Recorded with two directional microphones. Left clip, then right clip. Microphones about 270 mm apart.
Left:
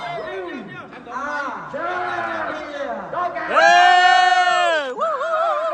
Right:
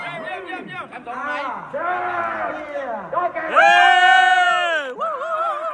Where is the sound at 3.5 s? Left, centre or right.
Centre.